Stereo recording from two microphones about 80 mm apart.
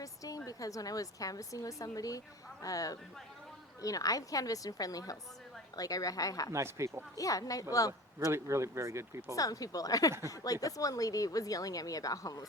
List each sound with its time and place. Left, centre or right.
0.0 s a woman's voice: left
6.5 s speech: right
7.2 s speech: left
8.2 s speech: right
9.3 s speech: left